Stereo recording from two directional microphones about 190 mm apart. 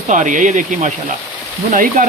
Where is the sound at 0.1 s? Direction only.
40° right (ahead or behind).